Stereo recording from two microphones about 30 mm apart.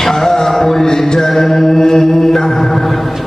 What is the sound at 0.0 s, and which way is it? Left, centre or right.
Music, centre.